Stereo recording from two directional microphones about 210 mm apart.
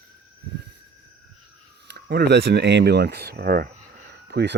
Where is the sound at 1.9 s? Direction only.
50° right (ahead or behind).